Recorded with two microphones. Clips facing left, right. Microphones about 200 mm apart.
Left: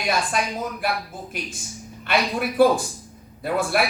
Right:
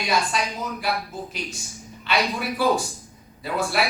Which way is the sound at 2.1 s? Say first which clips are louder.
Left 2 dB; 55° left (ahead or behind).